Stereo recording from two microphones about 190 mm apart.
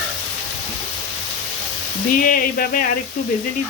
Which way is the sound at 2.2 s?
50° left (ahead or behind).